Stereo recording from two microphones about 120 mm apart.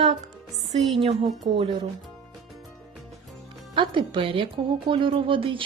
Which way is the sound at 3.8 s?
45° right (ahead or behind).